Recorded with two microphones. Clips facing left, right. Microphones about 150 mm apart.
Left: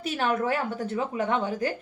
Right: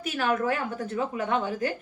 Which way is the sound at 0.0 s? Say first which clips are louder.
Even; 30° left (ahead or behind).